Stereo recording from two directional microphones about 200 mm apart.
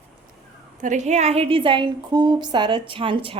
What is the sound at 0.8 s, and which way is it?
Speech, 35° right (ahead or behind).